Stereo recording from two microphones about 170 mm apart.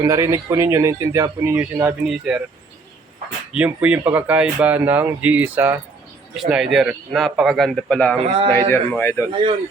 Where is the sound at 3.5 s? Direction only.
10° right (ahead or behind); by 9.2 s 15° left (ahead or behind).